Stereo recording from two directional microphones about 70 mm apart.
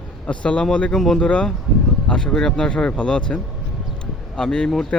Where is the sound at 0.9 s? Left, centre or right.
Centre.